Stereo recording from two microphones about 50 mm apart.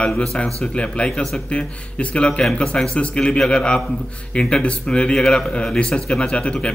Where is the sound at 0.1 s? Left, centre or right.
Centre.